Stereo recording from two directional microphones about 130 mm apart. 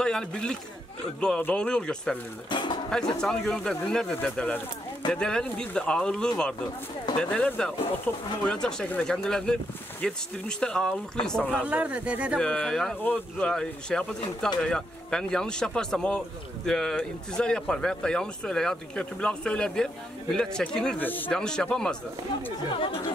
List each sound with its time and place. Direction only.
0.0 s speech: 5° left (ahead or behind)
2.5 s a sound: 35° left (ahead or behind)
2.9 s speech: 5° left (ahead or behind)
11.4 s speech: 10° right (ahead or behind)
12.4 s speech: 5° left (ahead or behind)
22.8 s speech: 45° left (ahead or behind)